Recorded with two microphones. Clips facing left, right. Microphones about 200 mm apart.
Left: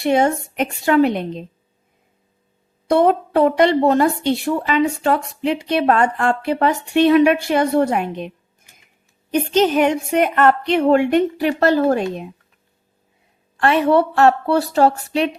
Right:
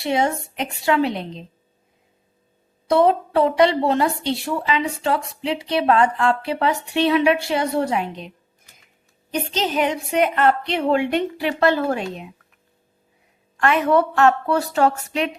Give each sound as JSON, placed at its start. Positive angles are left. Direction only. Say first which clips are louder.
{"t": 0.0, "sound": "a woman's voice", "louder": "left 5 dB", "side_deg": 50}
{"t": 2.8, "sound": "a woman's voice", "louder": "left 2 dB", "side_deg": 50}
{"t": 9.3, "sound": "a woman's voice", "louder": "left 7 dB", "side_deg": 50}
{"t": 13.6, "sound": "a woman's voice", "louder": "left 3 dB", "side_deg": 35}